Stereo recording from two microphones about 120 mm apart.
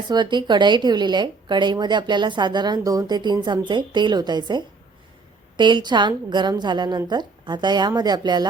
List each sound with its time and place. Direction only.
0.1 s a woman's voice: 40° right (ahead or behind)